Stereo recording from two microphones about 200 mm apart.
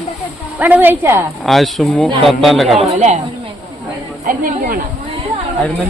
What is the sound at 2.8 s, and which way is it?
Speech, 35° right (ahead or behind).